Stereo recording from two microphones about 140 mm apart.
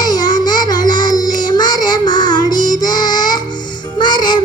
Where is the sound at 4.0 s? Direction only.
35° left (ahead or behind).